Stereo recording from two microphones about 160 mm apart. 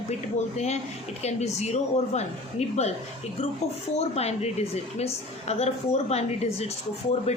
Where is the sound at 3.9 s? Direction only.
40° left (ahead or behind).